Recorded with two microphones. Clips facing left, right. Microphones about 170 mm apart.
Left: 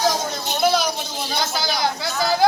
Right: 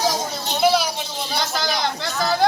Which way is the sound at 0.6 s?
5° right (ahead or behind).